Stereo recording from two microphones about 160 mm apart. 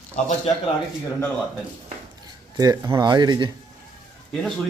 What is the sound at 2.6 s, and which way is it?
Speech, 25° right (ahead or behind).